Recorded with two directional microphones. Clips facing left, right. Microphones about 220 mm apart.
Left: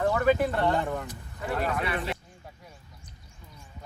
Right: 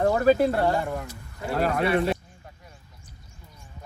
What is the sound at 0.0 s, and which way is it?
Speech, 40° right (ahead or behind).